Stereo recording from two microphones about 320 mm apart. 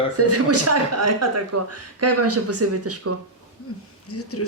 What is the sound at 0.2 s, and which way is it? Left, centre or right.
Speech, right.